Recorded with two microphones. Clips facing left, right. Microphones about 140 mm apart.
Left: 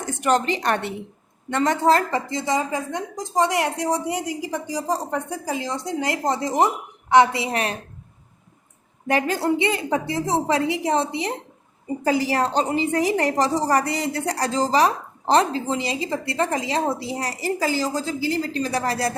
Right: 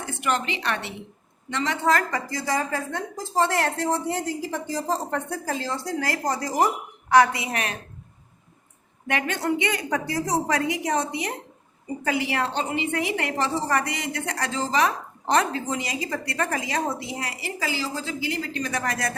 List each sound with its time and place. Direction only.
0.0 s a woman's voice: 40° left (ahead or behind)
1.9 s a woman's voice: 30° left (ahead or behind)
9.0 s a woman's voice: 35° left (ahead or behind)